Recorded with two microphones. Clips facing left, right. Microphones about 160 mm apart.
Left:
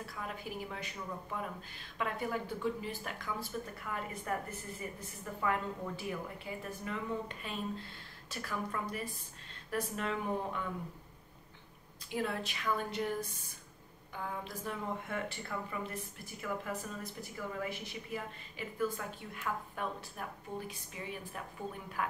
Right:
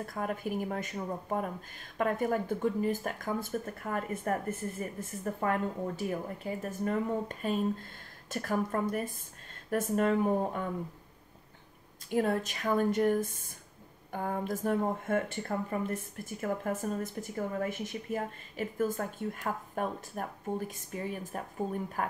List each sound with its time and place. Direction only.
0.0 s speech: 50° right (ahead or behind)
12.1 s speech: 45° right (ahead or behind)